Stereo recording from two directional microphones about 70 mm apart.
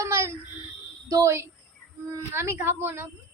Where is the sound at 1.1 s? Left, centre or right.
Right.